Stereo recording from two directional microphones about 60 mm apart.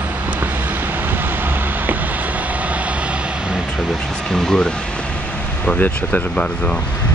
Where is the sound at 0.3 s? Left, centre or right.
Right.